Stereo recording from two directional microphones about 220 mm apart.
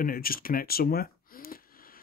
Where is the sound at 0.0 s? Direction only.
40° left (ahead or behind).